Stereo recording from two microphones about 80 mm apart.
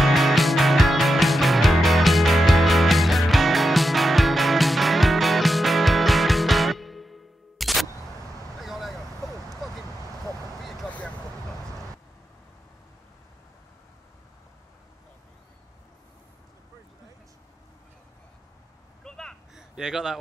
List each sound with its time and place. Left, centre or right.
0.0 s music: centre
8.5 s vehicle: centre
10.9 s vehicle: centre
19.0 s gasp: centre
19.5 s a sound: centre